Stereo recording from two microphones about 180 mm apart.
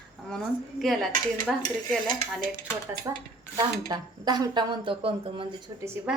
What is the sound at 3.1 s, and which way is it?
Speech, 15° right (ahead or behind).